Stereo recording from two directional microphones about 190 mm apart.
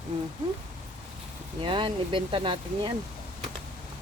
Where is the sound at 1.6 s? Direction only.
25° right (ahead or behind).